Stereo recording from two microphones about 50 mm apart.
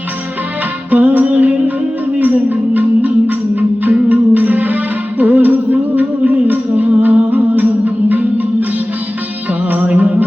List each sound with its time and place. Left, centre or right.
0.9 s music: right
9.6 s music: right